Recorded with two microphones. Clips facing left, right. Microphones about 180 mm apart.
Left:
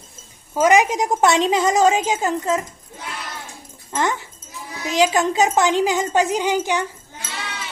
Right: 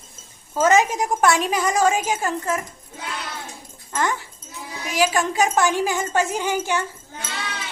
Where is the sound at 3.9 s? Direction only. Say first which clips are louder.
Left 2 dB; 20° left (ahead or behind).